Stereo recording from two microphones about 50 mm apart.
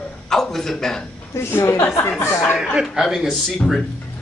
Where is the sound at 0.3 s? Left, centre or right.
Centre.